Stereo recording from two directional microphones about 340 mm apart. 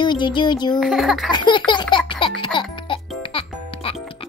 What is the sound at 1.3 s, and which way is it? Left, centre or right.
Speech, centre.